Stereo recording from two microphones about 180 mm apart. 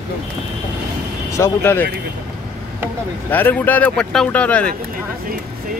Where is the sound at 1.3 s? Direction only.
15° left (ahead or behind).